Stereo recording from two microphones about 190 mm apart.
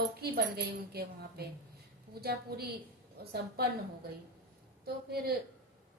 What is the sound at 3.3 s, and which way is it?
Speech, 55° right (ahead or behind).